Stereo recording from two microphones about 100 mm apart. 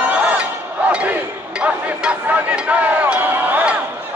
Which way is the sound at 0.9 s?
10° right (ahead or behind).